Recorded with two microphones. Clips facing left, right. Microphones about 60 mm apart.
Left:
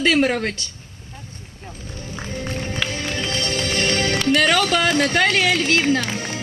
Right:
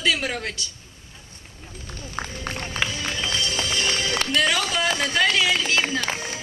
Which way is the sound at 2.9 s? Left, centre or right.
Left.